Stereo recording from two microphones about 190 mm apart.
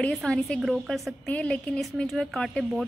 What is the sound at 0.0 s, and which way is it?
A woman's voice, 5° left (ahead or behind).